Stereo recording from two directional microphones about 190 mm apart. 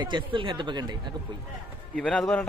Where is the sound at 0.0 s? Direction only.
25° right (ahead or behind).